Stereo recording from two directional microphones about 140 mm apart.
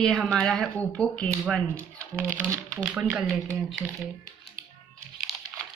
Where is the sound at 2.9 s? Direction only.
5° right (ahead or behind).